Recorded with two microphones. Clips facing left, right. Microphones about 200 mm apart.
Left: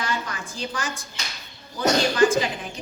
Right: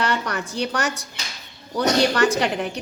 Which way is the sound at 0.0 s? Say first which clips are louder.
Right 5 dB; 70° right (ahead or behind).